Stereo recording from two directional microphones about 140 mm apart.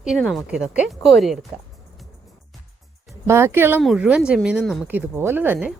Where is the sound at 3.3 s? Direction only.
20° right (ahead or behind).